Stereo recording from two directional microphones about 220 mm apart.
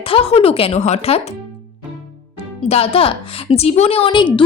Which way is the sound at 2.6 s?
25° left (ahead or behind).